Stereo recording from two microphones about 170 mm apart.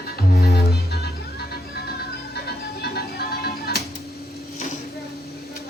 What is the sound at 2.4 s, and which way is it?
Music, 70° left (ahead or behind).